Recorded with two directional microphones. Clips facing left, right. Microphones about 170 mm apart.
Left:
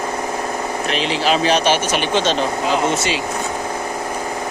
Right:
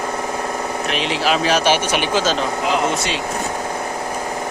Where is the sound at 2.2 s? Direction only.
Centre (ahead or behind).